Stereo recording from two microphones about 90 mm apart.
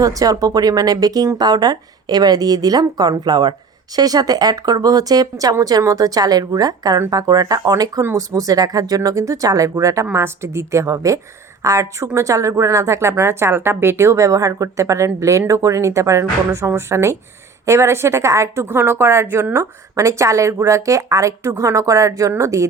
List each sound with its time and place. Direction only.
0.0 s speech: 40° right (ahead or behind)